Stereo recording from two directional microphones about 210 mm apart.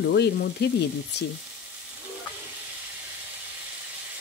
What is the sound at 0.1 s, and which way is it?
Sizzle, 55° left (ahead or behind).